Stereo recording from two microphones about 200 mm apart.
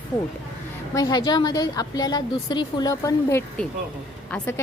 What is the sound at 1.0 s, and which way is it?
A woman's voice, 20° left (ahead or behind).